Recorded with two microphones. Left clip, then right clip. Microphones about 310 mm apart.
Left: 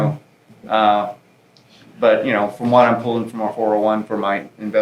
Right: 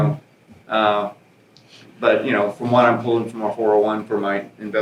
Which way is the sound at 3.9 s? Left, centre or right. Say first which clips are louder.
Left 3 dB; left.